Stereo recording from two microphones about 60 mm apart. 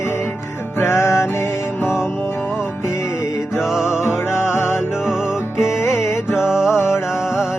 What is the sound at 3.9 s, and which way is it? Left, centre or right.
Music, left.